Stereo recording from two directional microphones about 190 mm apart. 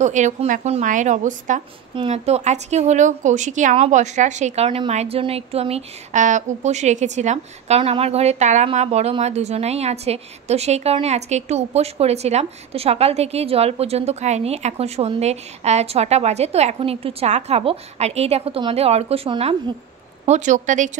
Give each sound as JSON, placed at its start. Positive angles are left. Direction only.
{"t": 0.0, "sound": "a woman's voice", "side_deg": -40}